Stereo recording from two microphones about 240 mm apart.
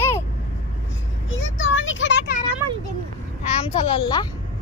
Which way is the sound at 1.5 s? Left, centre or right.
Left.